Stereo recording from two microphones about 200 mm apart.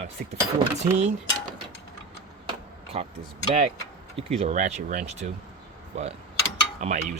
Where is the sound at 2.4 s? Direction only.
30° right (ahead or behind).